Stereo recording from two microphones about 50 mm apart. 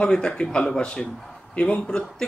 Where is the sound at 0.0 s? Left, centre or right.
Centre.